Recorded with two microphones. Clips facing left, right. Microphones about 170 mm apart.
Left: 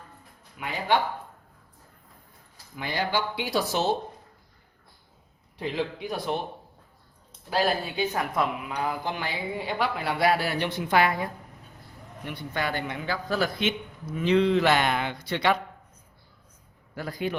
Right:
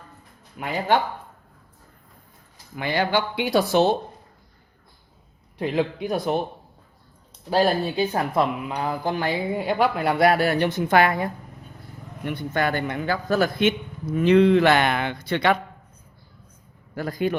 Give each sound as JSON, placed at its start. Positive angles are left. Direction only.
{"t": 0.6, "sound": "speech", "side_deg": -45}
{"t": 2.7, "sound": "speech", "side_deg": -65}
{"t": 5.5, "sound": "speech", "side_deg": -50}
{"t": 7.5, "sound": "speech", "side_deg": -35}
{"t": 16.9, "sound": "speech", "side_deg": -45}